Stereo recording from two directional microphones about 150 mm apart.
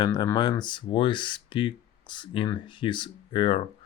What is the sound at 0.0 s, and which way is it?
Speech, 25° left (ahead or behind).